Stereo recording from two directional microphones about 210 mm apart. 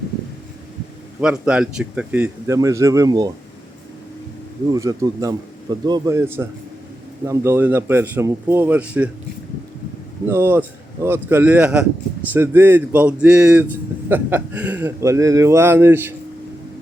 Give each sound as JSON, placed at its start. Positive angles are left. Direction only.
{"t": 1.2, "sound": "speech", "side_deg": -5}
{"t": 4.7, "sound": "speech", "side_deg": -15}
{"t": 10.2, "sound": "speech", "side_deg": -10}